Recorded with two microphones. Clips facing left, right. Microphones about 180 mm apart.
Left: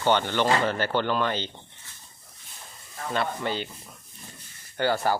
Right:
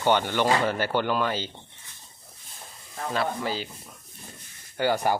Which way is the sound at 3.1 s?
5° right (ahead or behind).